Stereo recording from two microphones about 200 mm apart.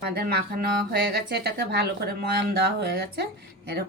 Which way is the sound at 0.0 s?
50° right (ahead or behind).